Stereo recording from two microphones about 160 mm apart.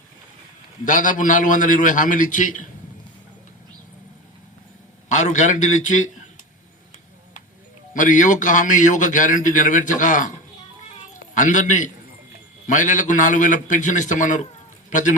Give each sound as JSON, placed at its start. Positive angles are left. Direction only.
{"t": 0.9, "sound": "a man's voice", "side_deg": 55}
{"t": 5.0, "sound": "a man's voice", "side_deg": 50}
{"t": 7.9, "sound": "a man's voice", "side_deg": 55}
{"t": 10.9, "sound": "a sound", "side_deg": 50}
{"t": 12.6, "sound": "a man's voice", "side_deg": 50}